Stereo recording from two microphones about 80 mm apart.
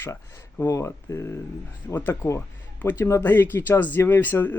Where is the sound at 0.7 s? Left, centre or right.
Left.